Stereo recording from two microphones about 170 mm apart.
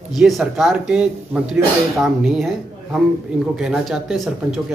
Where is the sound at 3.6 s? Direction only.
5° right (ahead or behind).